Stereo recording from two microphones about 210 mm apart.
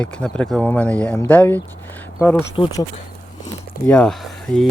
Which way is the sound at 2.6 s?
25° left (ahead or behind).